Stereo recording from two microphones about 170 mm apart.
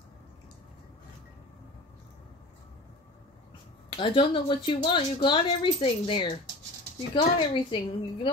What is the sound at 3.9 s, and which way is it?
A woman's voice, 30° left (ahead or behind).